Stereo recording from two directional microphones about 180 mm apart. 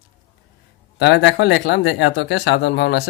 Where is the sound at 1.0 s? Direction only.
70° left (ahead or behind).